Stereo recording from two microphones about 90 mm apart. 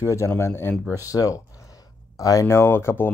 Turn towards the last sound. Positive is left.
turn(degrees=25)  # may be behind; listen again after turning